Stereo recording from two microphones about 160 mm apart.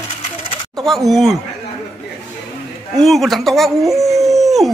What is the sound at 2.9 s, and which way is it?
Speech, centre (ahead or behind).